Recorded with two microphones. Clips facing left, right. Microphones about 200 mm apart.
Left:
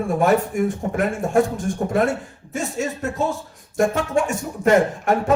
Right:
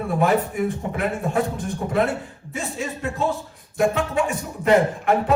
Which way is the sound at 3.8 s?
45° left (ahead or behind).